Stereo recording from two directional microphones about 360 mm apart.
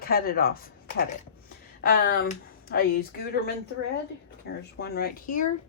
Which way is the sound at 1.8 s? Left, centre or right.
Left.